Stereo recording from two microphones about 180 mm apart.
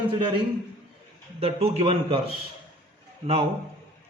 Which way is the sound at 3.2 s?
30° right (ahead or behind).